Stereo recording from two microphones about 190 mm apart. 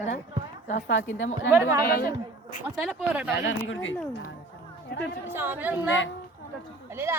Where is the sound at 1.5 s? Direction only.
10° right (ahead or behind).